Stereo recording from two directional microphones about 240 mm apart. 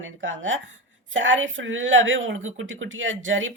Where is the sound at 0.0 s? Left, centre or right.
Right.